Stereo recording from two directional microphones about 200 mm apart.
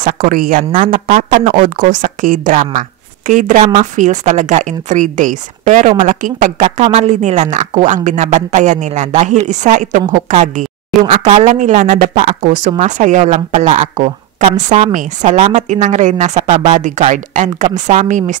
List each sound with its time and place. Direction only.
0.0 s a woman's voice: 45° right (ahead or behind)